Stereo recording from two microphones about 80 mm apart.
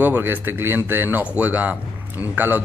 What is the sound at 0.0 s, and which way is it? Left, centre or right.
Speech, right.